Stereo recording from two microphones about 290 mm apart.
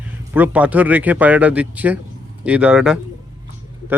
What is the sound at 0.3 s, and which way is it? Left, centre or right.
A man's voice, centre.